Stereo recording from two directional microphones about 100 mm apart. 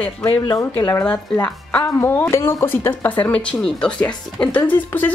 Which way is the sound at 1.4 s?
15° left (ahead or behind).